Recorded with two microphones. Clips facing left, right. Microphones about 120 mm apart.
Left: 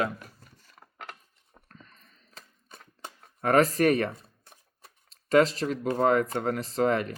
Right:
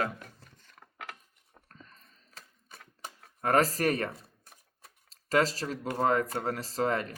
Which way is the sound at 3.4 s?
40° right (ahead or behind).